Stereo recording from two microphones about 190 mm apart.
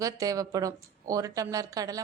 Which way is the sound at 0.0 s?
20° right (ahead or behind).